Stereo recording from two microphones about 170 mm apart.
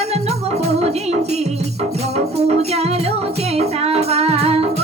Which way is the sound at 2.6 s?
40° right (ahead or behind).